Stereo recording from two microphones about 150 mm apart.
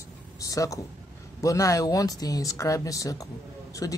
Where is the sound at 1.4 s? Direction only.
20° left (ahead or behind).